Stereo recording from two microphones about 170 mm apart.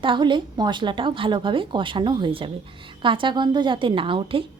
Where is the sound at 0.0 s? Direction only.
30° right (ahead or behind).